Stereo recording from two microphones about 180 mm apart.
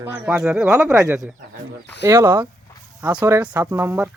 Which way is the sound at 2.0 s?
15° right (ahead or behind).